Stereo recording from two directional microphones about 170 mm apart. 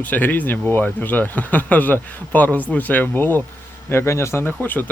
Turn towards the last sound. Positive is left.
turn(degrees=10)  # may be behind; listen again after turning